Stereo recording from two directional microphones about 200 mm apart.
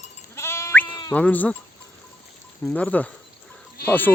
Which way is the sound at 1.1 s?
10° left (ahead or behind).